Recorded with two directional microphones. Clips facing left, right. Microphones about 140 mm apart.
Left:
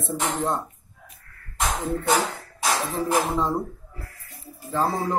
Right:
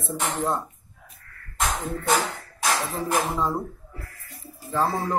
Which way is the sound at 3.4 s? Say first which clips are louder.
Left 1 dB; centre (ahead or behind).